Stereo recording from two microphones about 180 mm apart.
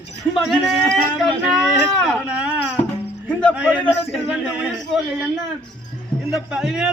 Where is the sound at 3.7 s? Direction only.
5° left (ahead or behind).